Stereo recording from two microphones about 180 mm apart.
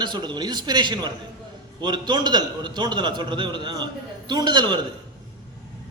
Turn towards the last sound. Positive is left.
turn(degrees=-25)  # may be behind; listen again after turning